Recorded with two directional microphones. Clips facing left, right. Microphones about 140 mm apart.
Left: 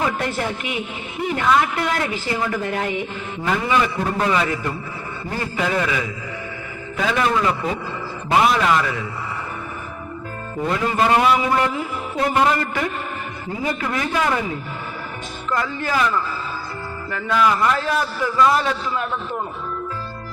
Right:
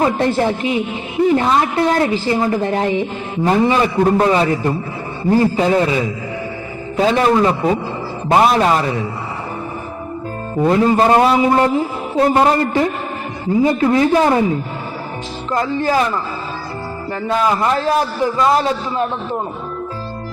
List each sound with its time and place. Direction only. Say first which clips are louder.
0.0 s a woman's voice: right 8 dB; 30° right (ahead or behind)
10.7 s a woman's voice: right 6 dB; 30° right (ahead or behind)
15.4 s a woman's voice: right 6 dB; 30° right (ahead or behind)